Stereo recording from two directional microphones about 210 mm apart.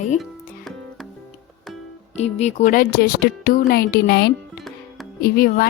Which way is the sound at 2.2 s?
30° left (ahead or behind).